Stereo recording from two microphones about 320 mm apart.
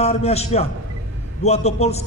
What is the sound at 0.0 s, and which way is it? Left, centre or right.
A man's voice, centre.